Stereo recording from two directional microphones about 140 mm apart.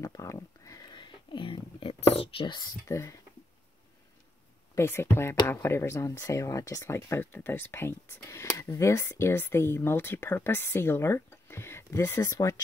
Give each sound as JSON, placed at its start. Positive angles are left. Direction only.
{"t": 0.0, "sound": "a sound", "side_deg": 20}
{"t": 2.9, "sound": "speech", "side_deg": 20}
{"t": 4.7, "sound": "speech", "side_deg": 15}